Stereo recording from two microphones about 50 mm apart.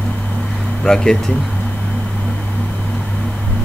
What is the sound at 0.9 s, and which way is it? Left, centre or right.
Speech, centre.